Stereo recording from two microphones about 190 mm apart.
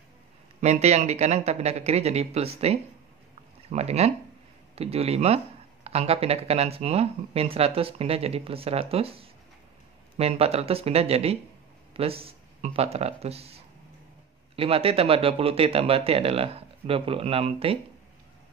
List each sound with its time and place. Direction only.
0.6 s speech: 35° right (ahead or behind)
3.7 s speech: 35° right (ahead or behind)